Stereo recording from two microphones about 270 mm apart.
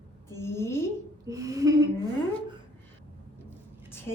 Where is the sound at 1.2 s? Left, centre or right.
Centre.